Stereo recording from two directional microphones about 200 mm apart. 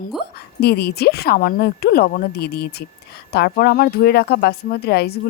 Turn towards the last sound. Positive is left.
turn(degrees=50)  # may be behind; listen again after turning